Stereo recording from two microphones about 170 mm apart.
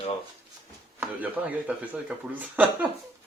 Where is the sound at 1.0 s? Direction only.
10° right (ahead or behind).